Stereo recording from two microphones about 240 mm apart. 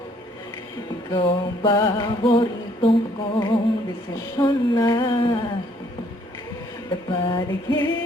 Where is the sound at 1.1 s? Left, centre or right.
Centre.